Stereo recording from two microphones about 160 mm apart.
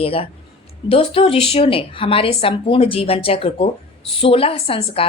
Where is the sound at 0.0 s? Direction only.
35° left (ahead or behind).